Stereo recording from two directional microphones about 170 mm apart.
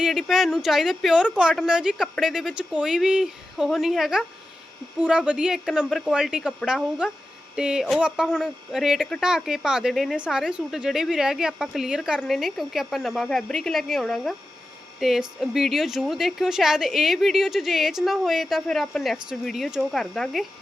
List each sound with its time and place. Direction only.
0.0 s speech: centre (ahead or behind)